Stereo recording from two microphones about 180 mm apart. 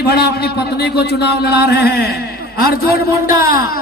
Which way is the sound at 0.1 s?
65° left (ahead or behind).